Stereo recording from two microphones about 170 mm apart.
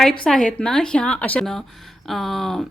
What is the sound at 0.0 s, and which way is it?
A woman's voice, 5° left (ahead or behind).